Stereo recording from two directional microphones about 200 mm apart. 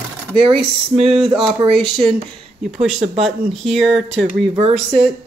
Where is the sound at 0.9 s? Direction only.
30° right (ahead or behind).